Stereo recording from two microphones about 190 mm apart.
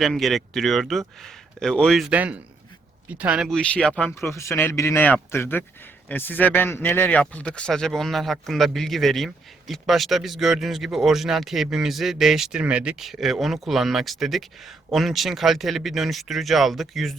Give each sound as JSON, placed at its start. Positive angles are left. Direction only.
{"t": 0.0, "sound": "a man's voice", "side_deg": 0}